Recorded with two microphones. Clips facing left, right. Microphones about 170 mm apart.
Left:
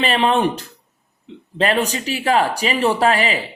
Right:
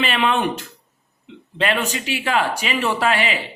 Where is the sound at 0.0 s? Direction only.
35° left (ahead or behind).